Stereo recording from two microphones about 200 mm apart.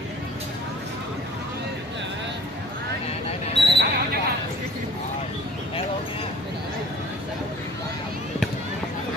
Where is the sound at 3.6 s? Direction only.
60° right (ahead or behind).